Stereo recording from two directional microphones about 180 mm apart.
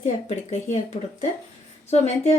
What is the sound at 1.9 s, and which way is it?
Speech, 35° left (ahead or behind).